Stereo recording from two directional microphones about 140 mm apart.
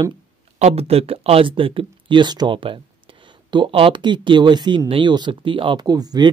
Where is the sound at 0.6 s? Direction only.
50° right (ahead or behind).